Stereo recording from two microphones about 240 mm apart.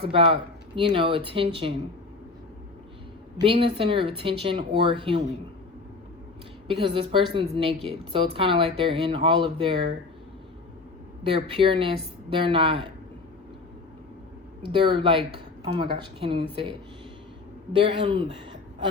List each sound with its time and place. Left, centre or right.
0.8 s speech: right
3.4 s speech: right
6.7 s speech: right
11.2 s speech: right
14.7 s speech: right
17.7 s speech: right